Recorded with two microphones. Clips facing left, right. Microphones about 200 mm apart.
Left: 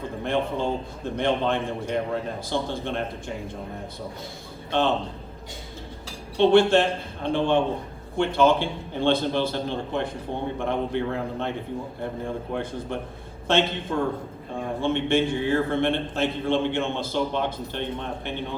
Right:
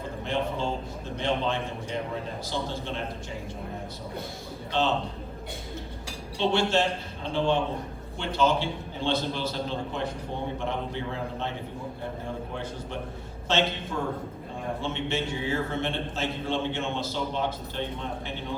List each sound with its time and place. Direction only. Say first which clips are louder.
0.3 s a man's voice: left 4 dB; 55° left (ahead or behind)
6.3 s a man's voice: left 8 dB; 55° left (ahead or behind)
13.5 s a man's voice: left 4 dB; 55° left (ahead or behind)